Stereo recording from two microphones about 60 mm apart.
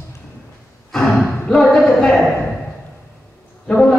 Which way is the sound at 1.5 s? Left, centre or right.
Centre.